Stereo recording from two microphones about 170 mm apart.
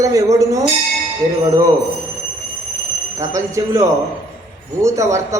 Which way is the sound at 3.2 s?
15° right (ahead or behind).